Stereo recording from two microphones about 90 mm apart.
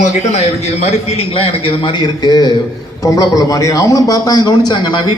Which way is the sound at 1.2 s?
90° left.